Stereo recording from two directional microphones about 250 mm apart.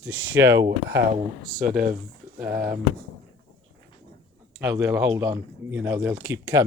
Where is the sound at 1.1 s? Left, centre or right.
Right.